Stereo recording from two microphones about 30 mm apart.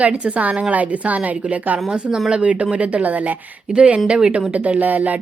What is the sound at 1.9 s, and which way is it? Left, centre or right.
Speech, right.